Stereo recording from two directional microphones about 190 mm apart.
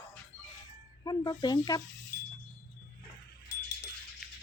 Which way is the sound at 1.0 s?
20° left (ahead or behind).